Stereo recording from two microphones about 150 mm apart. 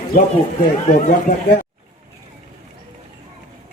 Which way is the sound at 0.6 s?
60° left (ahead or behind).